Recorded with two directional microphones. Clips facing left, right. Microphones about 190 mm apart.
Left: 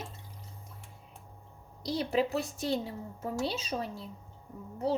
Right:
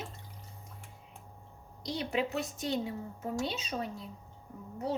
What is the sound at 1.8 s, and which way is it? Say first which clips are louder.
A woman's voice: left 4 dB; 35° left (ahead or behind).